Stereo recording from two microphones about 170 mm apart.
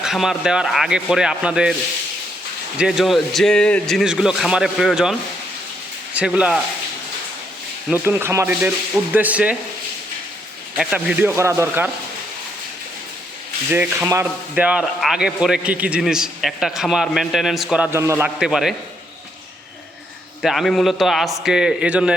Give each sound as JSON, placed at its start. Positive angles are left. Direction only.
{"t": 0.0, "sound": "speech", "side_deg": 0}
{"t": 2.7, "sound": "speech", "side_deg": -5}
{"t": 6.1, "sound": "speech", "side_deg": -5}
{"t": 7.9, "sound": "speech", "side_deg": -10}
{"t": 10.8, "sound": "speech", "side_deg": -5}
{"t": 11.3, "sound": "speech", "side_deg": -15}
{"t": 13.7, "sound": "speech", "side_deg": -10}
{"t": 17.9, "sound": "speech", "side_deg": -15}
{"t": 18.3, "sound": "speech", "side_deg": -5}
{"t": 20.4, "sound": "speech", "side_deg": 0}